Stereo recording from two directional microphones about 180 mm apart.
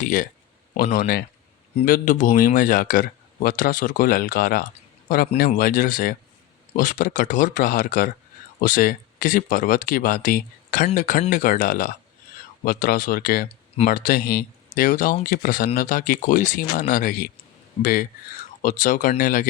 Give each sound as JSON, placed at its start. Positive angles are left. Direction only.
{"t": 0.0, "sound": "a man's voice", "side_deg": 50}